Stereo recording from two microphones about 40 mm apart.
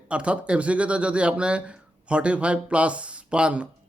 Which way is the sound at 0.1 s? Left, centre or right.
Right.